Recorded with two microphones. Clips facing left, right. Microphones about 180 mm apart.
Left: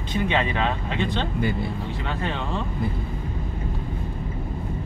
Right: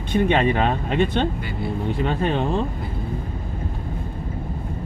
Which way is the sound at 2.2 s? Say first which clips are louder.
Right 7 dB; 55° right (ahead or behind).